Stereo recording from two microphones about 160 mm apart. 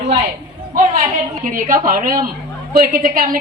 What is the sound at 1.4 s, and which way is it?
A woman's voice, 55° right (ahead or behind).